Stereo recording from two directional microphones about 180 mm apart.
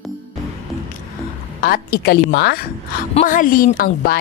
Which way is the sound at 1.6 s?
55° left (ahead or behind).